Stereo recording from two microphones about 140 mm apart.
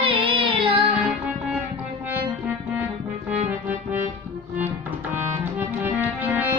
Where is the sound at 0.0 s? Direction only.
40° right (ahead or behind).